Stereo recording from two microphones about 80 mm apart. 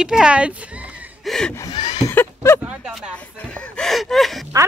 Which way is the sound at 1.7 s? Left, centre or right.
Left.